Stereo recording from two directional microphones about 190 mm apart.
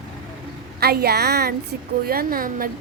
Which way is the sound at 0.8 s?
55° right (ahead or behind).